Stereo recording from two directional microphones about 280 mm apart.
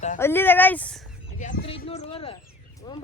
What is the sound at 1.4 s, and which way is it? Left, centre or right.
Speech, left.